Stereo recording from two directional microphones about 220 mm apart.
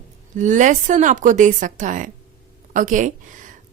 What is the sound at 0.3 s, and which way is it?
A woman's voice, 35° right (ahead or behind).